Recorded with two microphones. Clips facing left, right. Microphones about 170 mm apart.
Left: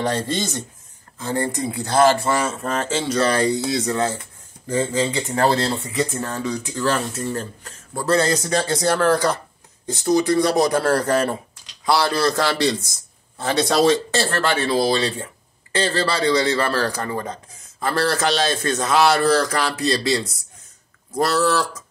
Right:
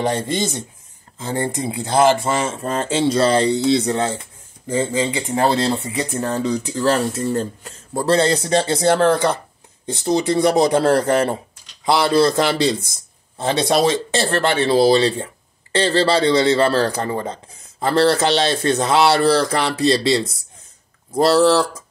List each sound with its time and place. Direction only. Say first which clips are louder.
0.0 s speech: right 2 dB; 20° right (ahead or behind)